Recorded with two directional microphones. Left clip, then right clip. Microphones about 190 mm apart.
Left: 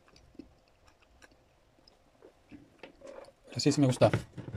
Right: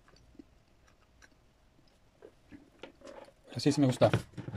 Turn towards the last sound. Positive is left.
turn(degrees=0)  # may be behind; listen again after turning